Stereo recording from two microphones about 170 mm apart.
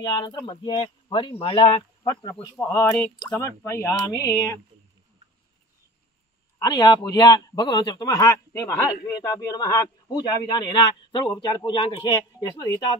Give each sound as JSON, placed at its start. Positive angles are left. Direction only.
{"t": 0.0, "sound": "a man's voice", "side_deg": 25}
{"t": 6.6, "sound": "a man's voice", "side_deg": 25}